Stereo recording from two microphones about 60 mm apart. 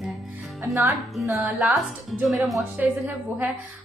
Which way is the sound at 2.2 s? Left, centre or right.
Centre.